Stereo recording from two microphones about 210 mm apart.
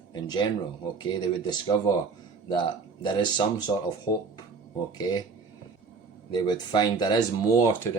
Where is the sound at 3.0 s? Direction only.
20° left (ahead or behind).